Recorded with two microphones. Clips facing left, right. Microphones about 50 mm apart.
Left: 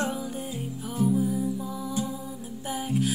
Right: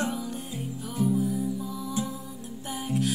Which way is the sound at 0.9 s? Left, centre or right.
Centre.